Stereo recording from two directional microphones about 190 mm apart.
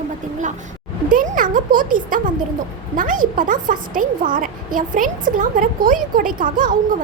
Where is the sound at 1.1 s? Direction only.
45° right (ahead or behind).